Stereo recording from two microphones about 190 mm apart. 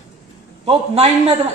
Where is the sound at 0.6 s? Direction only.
35° right (ahead or behind).